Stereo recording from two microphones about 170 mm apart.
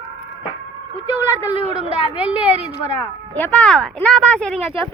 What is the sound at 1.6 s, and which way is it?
Speech, 35° right (ahead or behind).